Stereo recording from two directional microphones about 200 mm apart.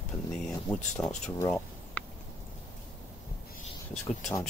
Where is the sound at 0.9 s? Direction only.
5° left (ahead or behind).